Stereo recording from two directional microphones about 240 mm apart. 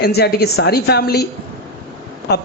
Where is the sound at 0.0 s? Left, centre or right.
Left.